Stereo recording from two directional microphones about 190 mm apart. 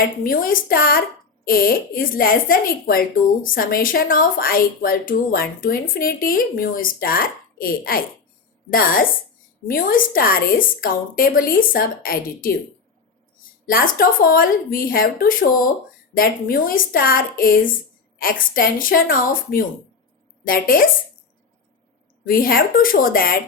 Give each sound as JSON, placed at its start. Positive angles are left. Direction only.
{"t": 0.3, "sound": "speech", "side_deg": 50}
{"t": 13.7, "sound": "speech", "side_deg": 50}
{"t": 22.3, "sound": "speech", "side_deg": 50}